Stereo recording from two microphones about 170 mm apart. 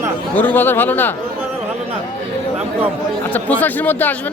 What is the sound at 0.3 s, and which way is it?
Speech, 10° left (ahead or behind).